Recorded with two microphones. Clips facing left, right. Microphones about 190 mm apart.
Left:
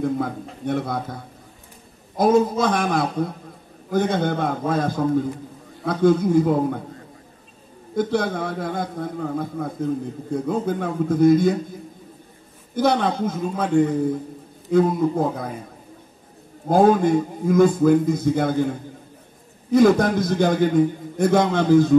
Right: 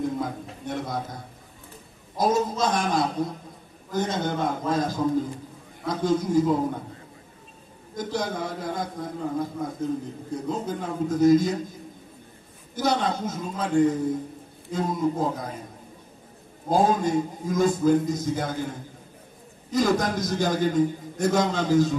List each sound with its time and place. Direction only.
0.0 s a man's voice: 60° left (ahead or behind)
2.1 s a man's voice: 55° left (ahead or behind)
7.9 s a man's voice: 55° left (ahead or behind)
12.7 s a man's voice: 55° left (ahead or behind)
16.6 s a man's voice: 60° left (ahead or behind)
19.7 s a man's voice: 55° left (ahead or behind)